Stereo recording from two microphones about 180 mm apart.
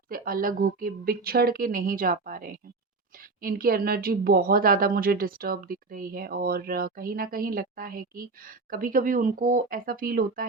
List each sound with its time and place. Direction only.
0.1 s a woman's voice: 50° right (ahead or behind)